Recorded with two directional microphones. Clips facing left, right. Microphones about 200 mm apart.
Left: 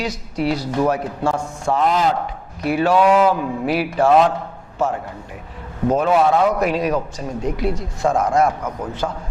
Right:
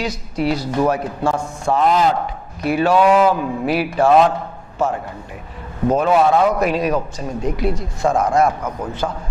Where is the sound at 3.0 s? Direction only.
35° right (ahead or behind).